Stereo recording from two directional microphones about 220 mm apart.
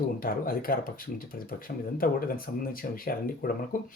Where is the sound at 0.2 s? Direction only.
40° left (ahead or behind).